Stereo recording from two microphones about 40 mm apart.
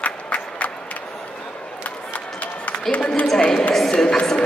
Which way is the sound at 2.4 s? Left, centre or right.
Left.